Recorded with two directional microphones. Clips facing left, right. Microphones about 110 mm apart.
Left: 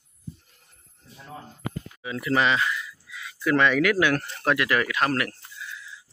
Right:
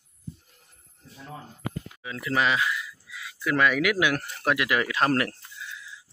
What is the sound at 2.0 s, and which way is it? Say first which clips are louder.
Speech: left 2 dB; 5° left (ahead or behind).